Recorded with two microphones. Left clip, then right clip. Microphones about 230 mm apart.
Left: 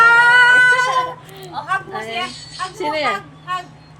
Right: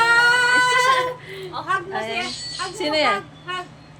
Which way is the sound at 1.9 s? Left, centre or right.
Centre.